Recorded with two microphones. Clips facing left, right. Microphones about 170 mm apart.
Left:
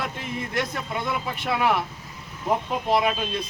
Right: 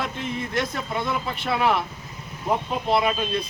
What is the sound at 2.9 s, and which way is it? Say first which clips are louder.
Speech: even; 10° left (ahead or behind).